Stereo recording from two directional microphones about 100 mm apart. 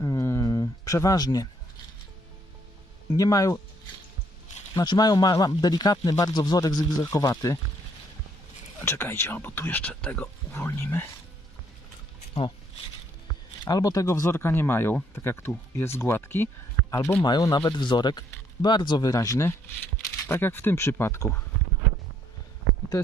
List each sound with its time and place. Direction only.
0.0 s a sound: 30° left (ahead or behind)
3.1 s speech: 35° left (ahead or behind)
4.7 s speech: 40° left (ahead or behind)
8.8 s speech: 25° left (ahead or behind)
13.7 s speech: 40° left (ahead or behind); by 17.2 s 20° left (ahead or behind)
17.4 s speech: 35° left (ahead or behind)